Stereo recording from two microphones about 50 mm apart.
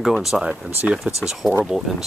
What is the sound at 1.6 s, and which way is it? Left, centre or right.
Speech, centre.